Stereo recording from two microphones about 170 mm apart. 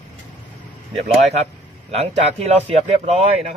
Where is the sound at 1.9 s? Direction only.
35° right (ahead or behind).